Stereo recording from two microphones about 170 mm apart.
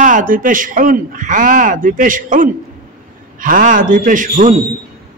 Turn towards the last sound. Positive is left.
turn(degrees=-50)  # may be behind; listen again after turning